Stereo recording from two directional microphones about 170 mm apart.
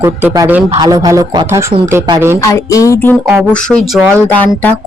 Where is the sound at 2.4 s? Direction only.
20° left (ahead or behind).